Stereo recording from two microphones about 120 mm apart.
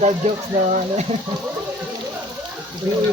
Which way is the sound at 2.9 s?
20° right (ahead or behind).